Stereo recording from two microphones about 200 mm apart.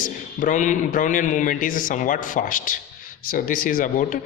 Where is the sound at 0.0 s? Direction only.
40° left (ahead or behind).